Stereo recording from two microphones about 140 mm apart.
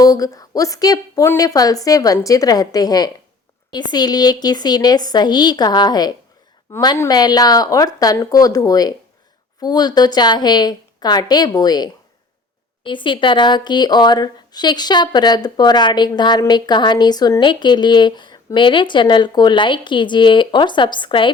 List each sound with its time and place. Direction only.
0.0 s a woman's voice: 25° left (ahead or behind)